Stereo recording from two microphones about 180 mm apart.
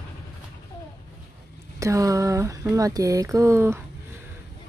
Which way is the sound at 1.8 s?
20° right (ahead or behind).